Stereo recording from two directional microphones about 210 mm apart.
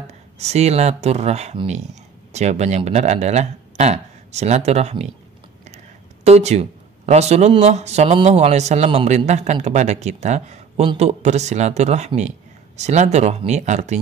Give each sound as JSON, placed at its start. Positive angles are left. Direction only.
{"t": 0.0, "sound": "speech", "side_deg": -30}
{"t": 6.2, "sound": "speech", "side_deg": -30}